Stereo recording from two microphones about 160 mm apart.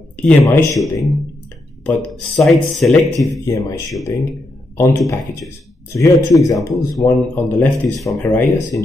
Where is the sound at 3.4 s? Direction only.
20° left (ahead or behind).